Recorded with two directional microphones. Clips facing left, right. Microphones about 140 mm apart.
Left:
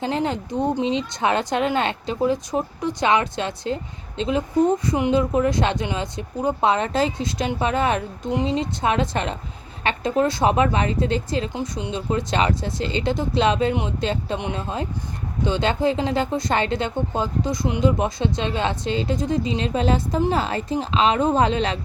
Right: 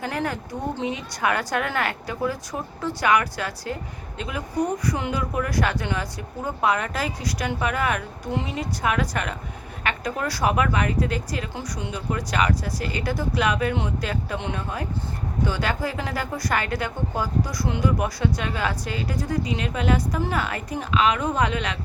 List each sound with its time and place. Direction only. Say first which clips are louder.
0.0 s speech: left 4 dB; 20° left (ahead or behind)